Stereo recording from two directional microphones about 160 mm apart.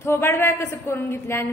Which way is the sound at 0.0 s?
15° left (ahead or behind).